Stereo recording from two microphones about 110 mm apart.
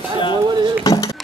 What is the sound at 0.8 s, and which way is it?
Speech, 35° left (ahead or behind).